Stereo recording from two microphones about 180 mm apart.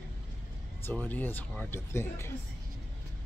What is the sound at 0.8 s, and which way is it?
Speech, 10° left (ahead or behind).